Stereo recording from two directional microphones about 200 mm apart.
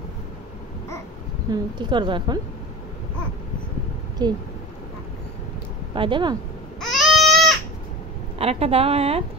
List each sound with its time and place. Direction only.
1.5 s a woman's voice: 25° right (ahead or behind)
4.2 s a woman's voice: 20° right (ahead or behind)
5.9 s a woman's voice: 25° right (ahead or behind)
6.8 s baby cry: centre (ahead or behind)
8.4 s a woman's voice: 30° right (ahead or behind)